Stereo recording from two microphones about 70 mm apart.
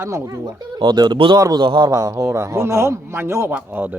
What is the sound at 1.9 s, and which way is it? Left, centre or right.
A man's voice, right.